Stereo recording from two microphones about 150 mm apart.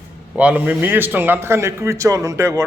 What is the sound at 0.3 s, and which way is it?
A man's voice, 10° right (ahead or behind).